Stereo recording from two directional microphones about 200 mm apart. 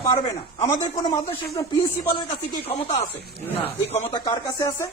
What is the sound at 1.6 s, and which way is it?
Speech, 20° left (ahead or behind).